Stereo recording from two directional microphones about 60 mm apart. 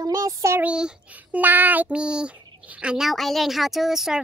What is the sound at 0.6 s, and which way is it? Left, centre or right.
Speech, centre.